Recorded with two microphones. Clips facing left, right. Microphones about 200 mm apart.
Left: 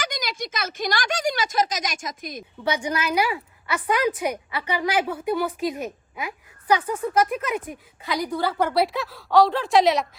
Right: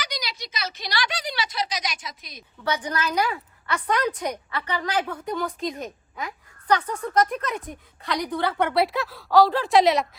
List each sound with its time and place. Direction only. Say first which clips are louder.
0.0 s speech: left 4 dB; 50° left (ahead or behind)
2.6 s a woman's voice: left 2 dB; 10° left (ahead or behind)